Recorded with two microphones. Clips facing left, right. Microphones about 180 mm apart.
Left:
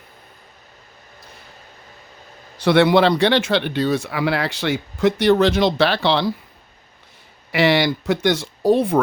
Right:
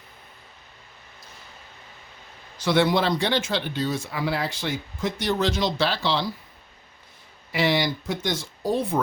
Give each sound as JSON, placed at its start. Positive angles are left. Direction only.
{"t": 2.6, "sound": "speech", "side_deg": 65}
{"t": 7.5, "sound": "speech", "side_deg": 75}